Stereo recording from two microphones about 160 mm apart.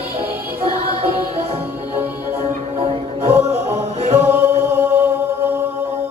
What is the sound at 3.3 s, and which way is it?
Music, 15° right (ahead or behind).